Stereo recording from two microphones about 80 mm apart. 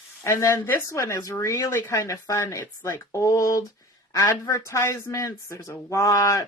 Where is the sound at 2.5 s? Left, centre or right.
Left.